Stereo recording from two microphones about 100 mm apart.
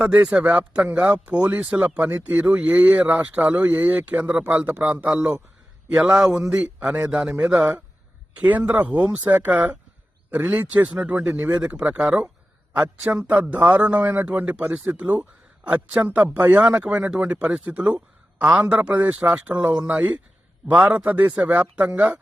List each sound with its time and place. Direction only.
0.0 s a man's voice: 15° right (ahead or behind)